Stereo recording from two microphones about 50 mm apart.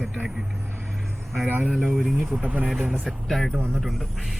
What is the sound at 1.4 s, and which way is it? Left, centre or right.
Speech, right.